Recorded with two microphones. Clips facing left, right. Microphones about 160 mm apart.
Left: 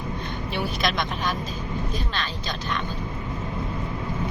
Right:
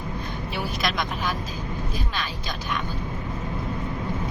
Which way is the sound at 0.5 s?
Centre (ahead or behind).